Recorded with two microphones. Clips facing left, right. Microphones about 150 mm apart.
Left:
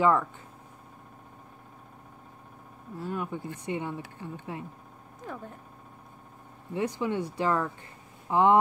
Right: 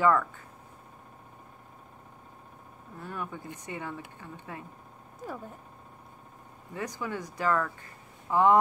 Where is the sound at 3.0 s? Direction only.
15° left (ahead or behind).